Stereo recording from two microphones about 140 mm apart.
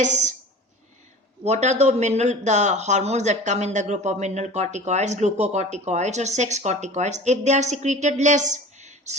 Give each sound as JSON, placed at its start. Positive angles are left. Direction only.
{"t": 0.0, "sound": "speech", "side_deg": -60}
{"t": 1.5, "sound": "speech", "side_deg": -55}